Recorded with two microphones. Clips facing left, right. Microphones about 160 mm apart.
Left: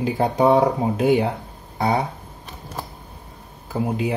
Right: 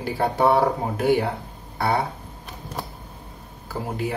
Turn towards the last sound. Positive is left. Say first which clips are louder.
# left 5 dB
turn(degrees=20)  # may be behind; listen again after turning